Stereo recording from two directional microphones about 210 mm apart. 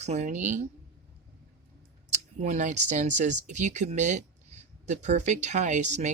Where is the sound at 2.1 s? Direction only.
35° right (ahead or behind).